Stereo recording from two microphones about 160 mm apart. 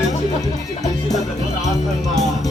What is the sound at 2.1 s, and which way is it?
Music, 45° left (ahead or behind).